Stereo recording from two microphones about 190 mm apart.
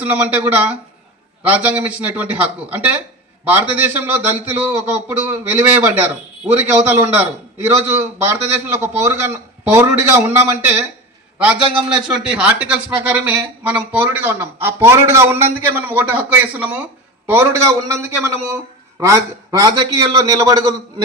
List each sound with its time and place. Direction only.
0.0 s a man's voice: 10° right (ahead or behind)
18.9 s a man's voice: 15° right (ahead or behind)